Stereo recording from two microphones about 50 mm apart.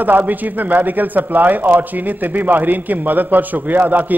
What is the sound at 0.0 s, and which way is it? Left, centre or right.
A man's voice, right.